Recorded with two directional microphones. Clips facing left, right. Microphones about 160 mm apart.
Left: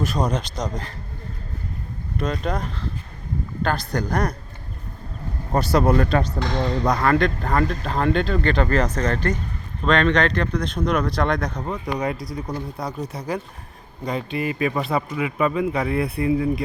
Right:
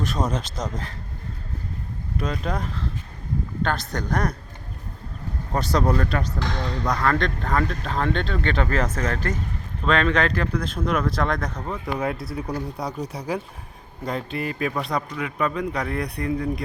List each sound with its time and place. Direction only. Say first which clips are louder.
0.0 s speech: left 2 dB; centre (ahead or behind)
2.1 s speech: left 2 dB; 5° right (ahead or behind)
5.5 s speech: left 4 dB; 5° left (ahead or behind)
5.9 s speech: left 4 dB; 25° left (ahead or behind)
7.0 s speech: left 4 dB; 10° left (ahead or behind)